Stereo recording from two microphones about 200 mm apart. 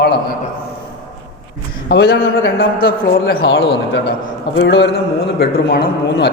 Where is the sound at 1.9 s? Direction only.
55° left (ahead or behind).